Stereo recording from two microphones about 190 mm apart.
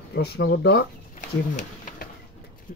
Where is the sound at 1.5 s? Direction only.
40° left (ahead or behind).